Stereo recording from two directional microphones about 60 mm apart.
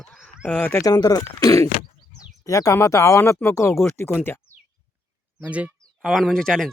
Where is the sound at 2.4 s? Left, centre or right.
Left.